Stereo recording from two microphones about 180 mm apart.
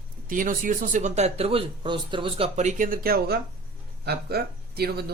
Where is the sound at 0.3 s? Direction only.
50° right (ahead or behind).